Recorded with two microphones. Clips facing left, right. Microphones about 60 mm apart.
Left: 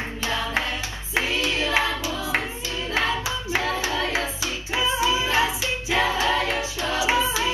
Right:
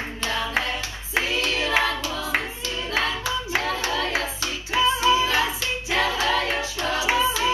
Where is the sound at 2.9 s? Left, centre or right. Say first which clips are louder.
Left 1 dB; centre.